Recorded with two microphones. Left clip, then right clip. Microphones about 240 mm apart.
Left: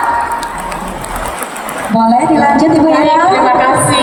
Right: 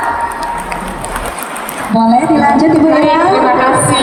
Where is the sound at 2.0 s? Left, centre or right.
Left.